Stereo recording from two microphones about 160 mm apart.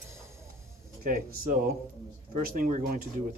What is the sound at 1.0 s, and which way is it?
Speech, 60° right (ahead or behind).